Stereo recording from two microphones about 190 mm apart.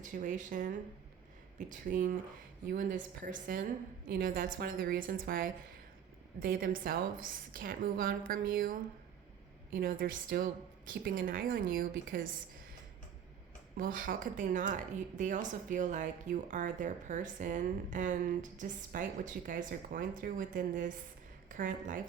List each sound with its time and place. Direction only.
0.0 s a woman's voice: 45° right (ahead or behind)
13.7 s a woman's voice: 45° right (ahead or behind)